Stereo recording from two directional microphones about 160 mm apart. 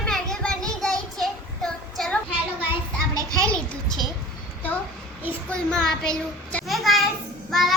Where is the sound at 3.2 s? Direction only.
20° right (ahead or behind).